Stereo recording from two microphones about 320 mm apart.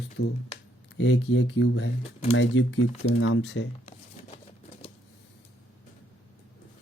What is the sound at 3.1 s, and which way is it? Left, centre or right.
Speech, left.